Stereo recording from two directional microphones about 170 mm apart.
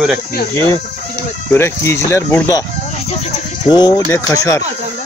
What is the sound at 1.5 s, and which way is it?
Speech, 15° left (ahead or behind).